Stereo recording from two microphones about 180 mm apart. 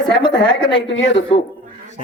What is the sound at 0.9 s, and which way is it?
Speech, 90° left.